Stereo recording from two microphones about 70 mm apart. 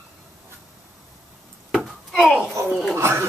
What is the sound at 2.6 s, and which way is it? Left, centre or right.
Speech, right.